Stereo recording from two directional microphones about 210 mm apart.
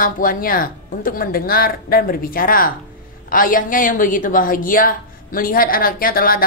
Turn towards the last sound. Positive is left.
turn(degrees=45)  # may be behind; listen again after turning